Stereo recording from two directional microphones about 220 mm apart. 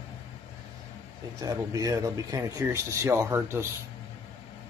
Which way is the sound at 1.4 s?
15° right (ahead or behind).